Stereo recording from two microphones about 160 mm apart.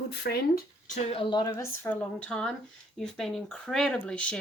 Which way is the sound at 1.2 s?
30° left (ahead or behind).